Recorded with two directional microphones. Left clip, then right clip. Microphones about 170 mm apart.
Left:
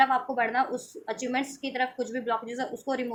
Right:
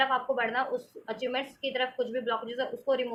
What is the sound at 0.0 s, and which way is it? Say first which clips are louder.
A woman's voice: left 3 dB; 50° left (ahead or behind).